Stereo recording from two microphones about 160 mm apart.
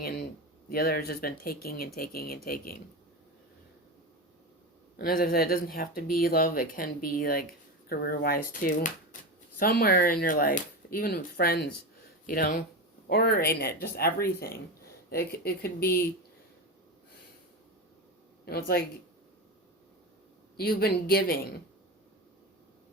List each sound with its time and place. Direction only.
0.7 s speech: 70° left (ahead or behind)
4.9 s speech: 65° left (ahead or behind)
12.2 s speech: 60° left (ahead or behind)
13.1 s speech: 80° left
18.4 s speech: 75° left (ahead or behind)
20.6 s speech: 70° left (ahead or behind)